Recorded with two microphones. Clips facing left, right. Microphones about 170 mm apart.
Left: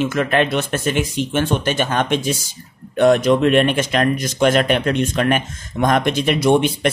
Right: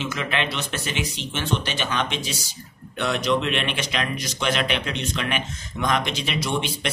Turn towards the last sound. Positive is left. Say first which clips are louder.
# left 11 dB
turn(degrees=50)  # may be behind; listen again after turning